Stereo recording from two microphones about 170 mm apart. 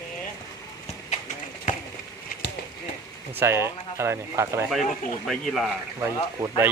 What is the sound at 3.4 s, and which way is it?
Speech, 15° right (ahead or behind).